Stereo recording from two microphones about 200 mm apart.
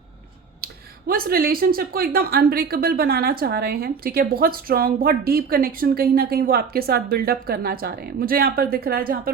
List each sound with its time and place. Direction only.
0.6 s speech: 50° right (ahead or behind)